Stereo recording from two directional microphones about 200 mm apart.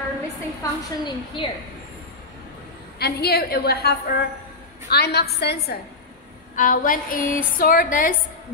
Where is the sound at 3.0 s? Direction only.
50° left (ahead or behind).